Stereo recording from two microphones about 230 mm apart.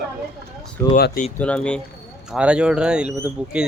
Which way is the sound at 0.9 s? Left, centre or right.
Left.